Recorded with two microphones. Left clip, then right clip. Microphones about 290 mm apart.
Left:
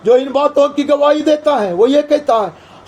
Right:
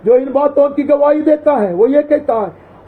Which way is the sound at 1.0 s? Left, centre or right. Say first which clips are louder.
Even; left.